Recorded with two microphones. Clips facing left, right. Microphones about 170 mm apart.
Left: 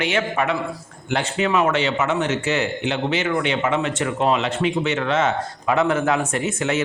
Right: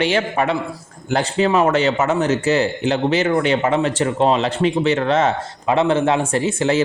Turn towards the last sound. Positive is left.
turn(degrees=-30)  # may be behind; listen again after turning